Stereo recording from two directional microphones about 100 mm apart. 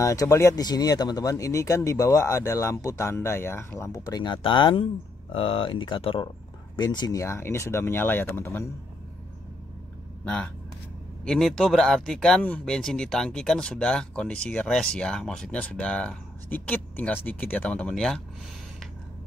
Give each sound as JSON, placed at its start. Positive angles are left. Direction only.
{"t": 0.0, "sound": "speech", "side_deg": 30}
{"t": 4.2, "sound": "speech", "side_deg": 55}
{"t": 6.8, "sound": "speech", "side_deg": 45}
{"t": 7.2, "sound": "speech", "side_deg": 25}
{"t": 10.2, "sound": "speech", "side_deg": 10}